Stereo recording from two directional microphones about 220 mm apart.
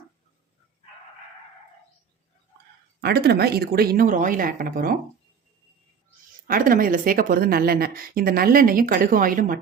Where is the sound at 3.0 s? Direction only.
45° right (ahead or behind).